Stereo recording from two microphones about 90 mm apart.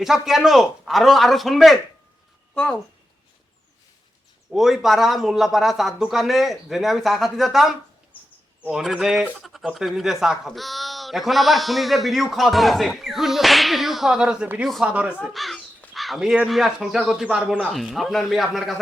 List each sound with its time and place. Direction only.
0.0 s speech: 5° right (ahead or behind)
4.5 s speech: centre (ahead or behind)
8.7 s speech: 5° right (ahead or behind)
15.2 s speech: centre (ahead or behind)
17.6 s speech: centre (ahead or behind)